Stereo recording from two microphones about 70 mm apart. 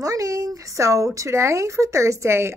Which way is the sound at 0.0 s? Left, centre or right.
Right.